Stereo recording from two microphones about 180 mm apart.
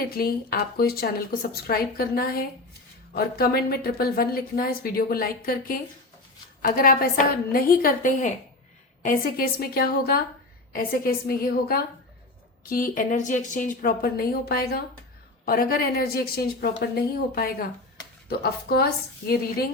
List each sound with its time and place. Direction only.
0.1 s a woman's voice: 60° left (ahead or behind)